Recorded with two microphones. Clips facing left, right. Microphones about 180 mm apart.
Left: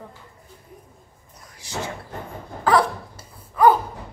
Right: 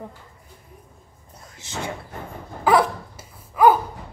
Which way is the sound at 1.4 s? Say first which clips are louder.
Left 2 dB; 25° right (ahead or behind).